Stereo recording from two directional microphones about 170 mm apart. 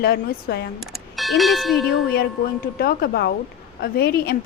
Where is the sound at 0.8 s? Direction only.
Centre (ahead or behind).